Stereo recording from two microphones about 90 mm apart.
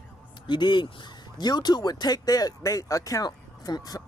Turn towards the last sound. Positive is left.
turn(degrees=45)  # may be behind; listen again after turning